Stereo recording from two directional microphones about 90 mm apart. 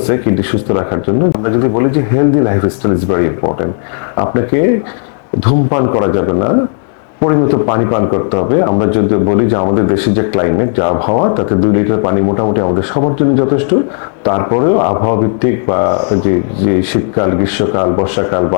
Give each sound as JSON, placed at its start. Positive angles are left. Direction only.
{"t": 0.1, "sound": "speech", "side_deg": 25}
{"t": 17.2, "sound": "speech", "side_deg": 20}